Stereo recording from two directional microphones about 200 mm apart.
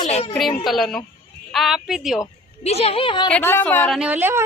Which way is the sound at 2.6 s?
30° left (ahead or behind).